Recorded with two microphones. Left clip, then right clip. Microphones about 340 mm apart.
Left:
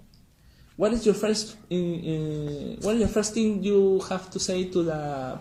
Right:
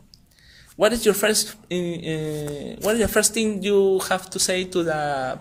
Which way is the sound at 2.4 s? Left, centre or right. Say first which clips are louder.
Right 6 dB; right.